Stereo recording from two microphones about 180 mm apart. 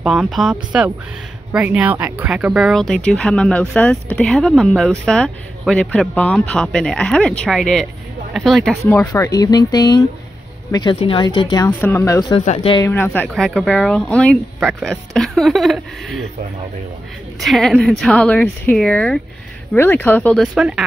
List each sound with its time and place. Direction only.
0.0 s speech: centre (ahead or behind)
8.8 s speech: 15° left (ahead or behind)
11.5 s speech: 15° left (ahead or behind)
12.4 s speech: 30° left (ahead or behind)
12.8 s speech: 10° left (ahead or behind)
17.4 s speech: centre (ahead or behind)